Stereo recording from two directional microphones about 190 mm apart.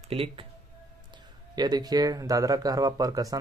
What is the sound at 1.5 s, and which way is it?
Speech, 20° right (ahead or behind).